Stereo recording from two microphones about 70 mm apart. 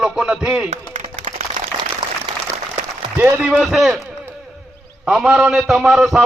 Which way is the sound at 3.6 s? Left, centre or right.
Centre.